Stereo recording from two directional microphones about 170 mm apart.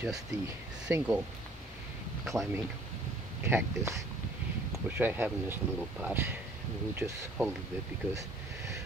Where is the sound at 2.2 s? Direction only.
15° right (ahead or behind).